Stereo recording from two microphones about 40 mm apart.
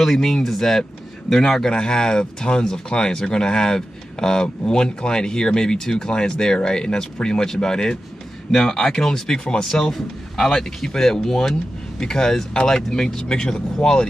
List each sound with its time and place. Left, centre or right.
0.0 s speech: centre; by 14.0 s left